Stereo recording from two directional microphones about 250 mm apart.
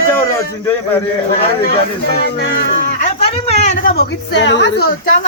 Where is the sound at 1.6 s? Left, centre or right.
Left.